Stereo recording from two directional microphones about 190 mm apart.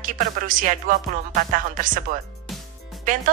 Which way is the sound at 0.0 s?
45° right (ahead or behind).